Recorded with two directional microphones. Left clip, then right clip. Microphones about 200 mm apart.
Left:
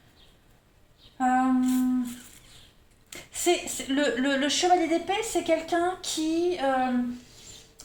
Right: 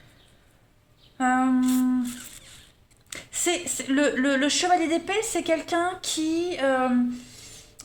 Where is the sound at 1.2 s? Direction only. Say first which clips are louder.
Right 1 dB; 30° right (ahead or behind).